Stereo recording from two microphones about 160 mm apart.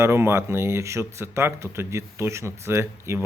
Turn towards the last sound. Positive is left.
turn(degrees=-15)  # may be behind; listen again after turning